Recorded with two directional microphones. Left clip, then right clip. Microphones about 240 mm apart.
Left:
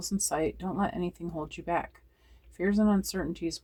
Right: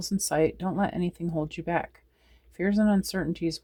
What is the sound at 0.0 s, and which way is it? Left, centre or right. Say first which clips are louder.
Speech: right 5 dB; right.